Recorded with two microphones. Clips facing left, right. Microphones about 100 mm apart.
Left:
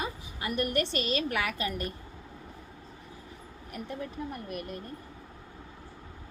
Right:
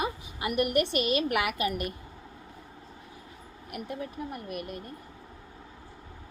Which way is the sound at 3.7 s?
10° right (ahead or behind).